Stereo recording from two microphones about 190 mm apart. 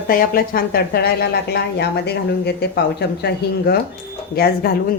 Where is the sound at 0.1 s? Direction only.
50° left (ahead or behind).